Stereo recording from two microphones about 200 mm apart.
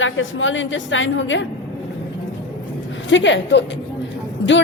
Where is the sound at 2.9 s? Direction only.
65° left (ahead or behind).